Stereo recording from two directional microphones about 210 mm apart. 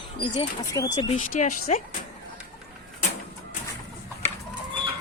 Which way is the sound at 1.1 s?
40° left (ahead or behind).